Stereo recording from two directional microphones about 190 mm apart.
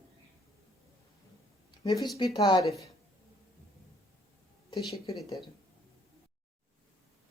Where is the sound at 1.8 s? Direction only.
20° left (ahead or behind).